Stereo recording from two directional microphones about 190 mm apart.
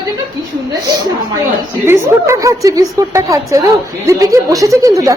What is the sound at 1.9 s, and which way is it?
A woman's voice, 15° right (ahead or behind).